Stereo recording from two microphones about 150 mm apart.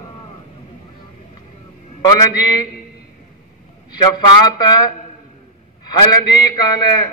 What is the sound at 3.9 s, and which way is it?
A man's voice, 30° left (ahead or behind).